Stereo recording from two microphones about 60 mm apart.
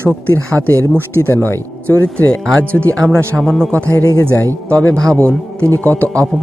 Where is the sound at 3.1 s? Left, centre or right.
Right.